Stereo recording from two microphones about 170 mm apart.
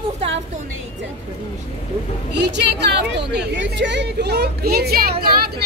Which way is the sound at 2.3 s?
90° right.